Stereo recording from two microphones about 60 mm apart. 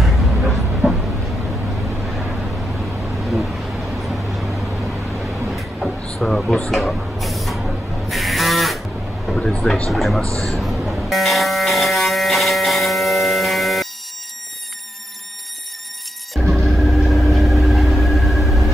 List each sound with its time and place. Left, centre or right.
0.0 s dog: centre
5.6 s a sound: centre
9.3 s a man's voice: centre
10.2 s a man's voice: right
10.5 s electric shaver: centre
16.3 s vehicle: centre